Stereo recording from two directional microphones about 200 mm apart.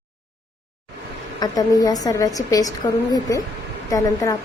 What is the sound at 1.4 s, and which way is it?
A woman's voice, 20° left (ahead or behind).